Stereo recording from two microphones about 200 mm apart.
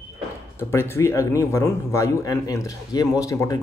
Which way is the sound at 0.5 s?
10° left (ahead or behind).